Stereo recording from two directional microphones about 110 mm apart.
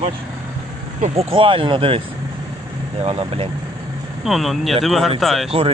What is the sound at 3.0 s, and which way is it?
Speech, 65° right (ahead or behind).